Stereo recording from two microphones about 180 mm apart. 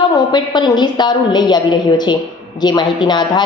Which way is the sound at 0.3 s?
25° left (ahead or behind).